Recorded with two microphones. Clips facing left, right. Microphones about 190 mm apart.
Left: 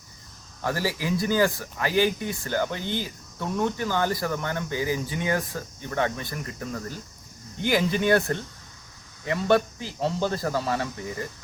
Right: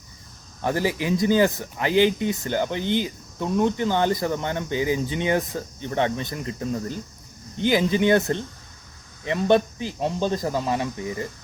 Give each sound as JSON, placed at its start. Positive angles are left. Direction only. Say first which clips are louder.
{"t": 0.6, "sound": "speech", "louder": "right 4 dB", "side_deg": -20}